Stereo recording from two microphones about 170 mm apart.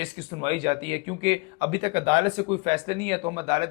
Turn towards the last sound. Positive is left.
turn(degrees=-35)  # may be behind; listen again after turning